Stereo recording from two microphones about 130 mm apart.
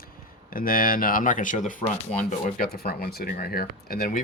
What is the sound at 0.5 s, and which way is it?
Speech, 90° left.